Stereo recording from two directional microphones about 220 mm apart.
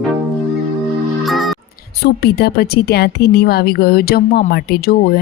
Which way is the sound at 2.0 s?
45° left (ahead or behind).